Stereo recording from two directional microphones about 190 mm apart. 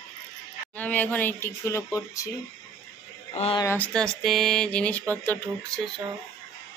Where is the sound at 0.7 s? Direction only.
10° left (ahead or behind).